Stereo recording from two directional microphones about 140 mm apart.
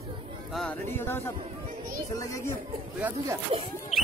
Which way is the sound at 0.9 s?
15° left (ahead or behind).